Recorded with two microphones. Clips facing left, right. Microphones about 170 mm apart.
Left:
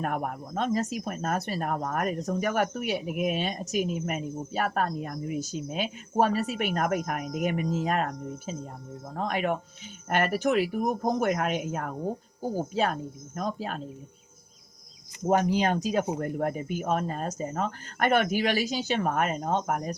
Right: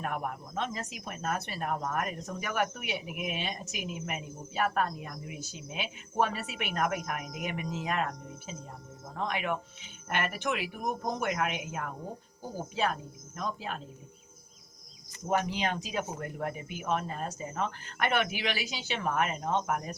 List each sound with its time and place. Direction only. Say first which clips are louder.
0.0 s speech: left 4 dB; 45° left (ahead or behind)
15.3 s speech: left 6 dB; 45° left (ahead or behind)